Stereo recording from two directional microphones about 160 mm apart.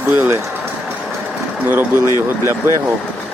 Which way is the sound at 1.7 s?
15° right (ahead or behind).